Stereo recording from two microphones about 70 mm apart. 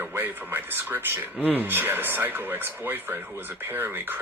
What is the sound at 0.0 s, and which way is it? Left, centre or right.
Speech, right.